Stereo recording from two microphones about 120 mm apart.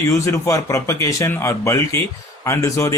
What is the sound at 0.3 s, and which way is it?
Speech, 25° left (ahead or behind).